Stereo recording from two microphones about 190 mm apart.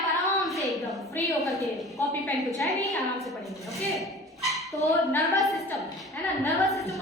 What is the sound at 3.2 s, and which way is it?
A woman's voice, centre (ahead or behind).